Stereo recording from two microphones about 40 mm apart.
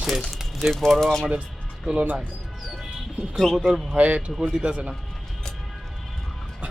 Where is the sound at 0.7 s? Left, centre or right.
Centre.